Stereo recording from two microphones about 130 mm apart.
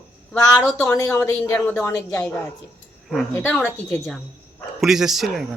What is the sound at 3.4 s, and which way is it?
Speech, centre (ahead or behind).